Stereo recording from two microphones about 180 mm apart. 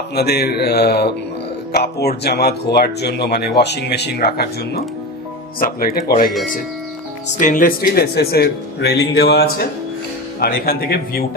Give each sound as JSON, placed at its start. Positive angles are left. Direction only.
{"t": 0.1, "sound": "speech", "side_deg": 65}
{"t": 7.3, "sound": "speech", "side_deg": 45}